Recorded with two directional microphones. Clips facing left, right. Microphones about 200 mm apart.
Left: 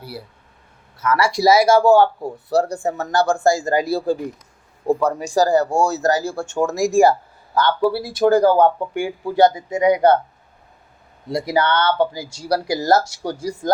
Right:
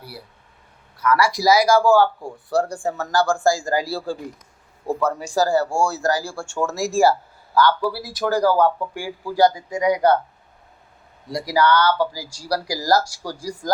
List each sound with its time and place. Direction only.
0.9 s speech: 25° left (ahead or behind)
11.3 s speech: 25° left (ahead or behind)